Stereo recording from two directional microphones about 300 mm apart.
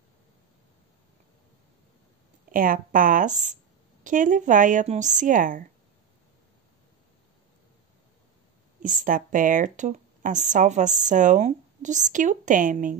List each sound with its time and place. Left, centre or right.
2.5 s speech: right
8.8 s speech: right